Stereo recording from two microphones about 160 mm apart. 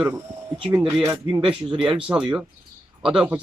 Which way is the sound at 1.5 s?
30° right (ahead or behind).